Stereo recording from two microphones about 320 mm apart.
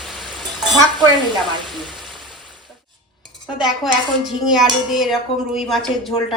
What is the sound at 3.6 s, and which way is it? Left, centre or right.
Speech, centre.